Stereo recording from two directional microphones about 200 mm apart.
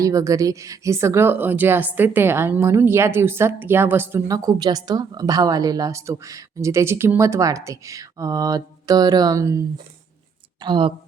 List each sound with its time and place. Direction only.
0.0 s a woman's voice: 15° right (ahead or behind)